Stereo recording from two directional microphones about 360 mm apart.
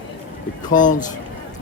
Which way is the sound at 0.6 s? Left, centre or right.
Left.